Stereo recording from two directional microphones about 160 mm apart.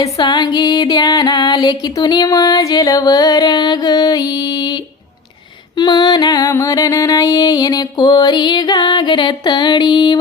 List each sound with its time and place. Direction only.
0.0 s music: 25° left (ahead or behind)